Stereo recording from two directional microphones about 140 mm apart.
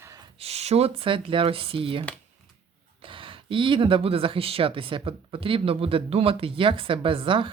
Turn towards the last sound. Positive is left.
turn(degrees=-40)  # may be behind; listen again after turning